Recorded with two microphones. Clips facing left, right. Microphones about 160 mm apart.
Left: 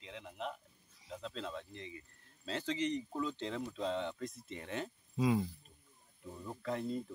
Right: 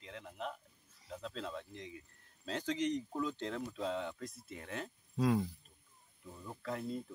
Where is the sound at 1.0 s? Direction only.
Centre (ahead or behind).